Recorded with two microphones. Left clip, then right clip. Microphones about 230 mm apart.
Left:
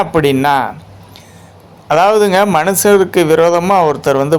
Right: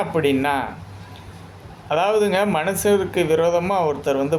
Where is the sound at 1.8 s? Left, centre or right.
Left.